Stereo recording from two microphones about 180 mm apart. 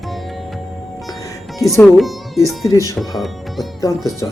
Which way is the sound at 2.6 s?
15° left (ahead or behind).